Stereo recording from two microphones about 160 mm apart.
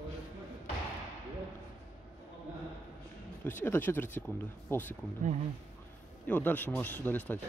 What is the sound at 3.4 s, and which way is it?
Speech, 15° left (ahead or behind).